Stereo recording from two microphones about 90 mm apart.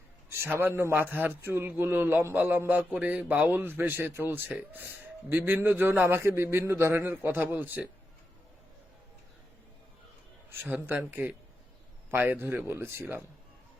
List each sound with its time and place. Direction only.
0.3 s a man's voice: 25° right (ahead or behind)
10.5 s a man's voice: 20° right (ahead or behind)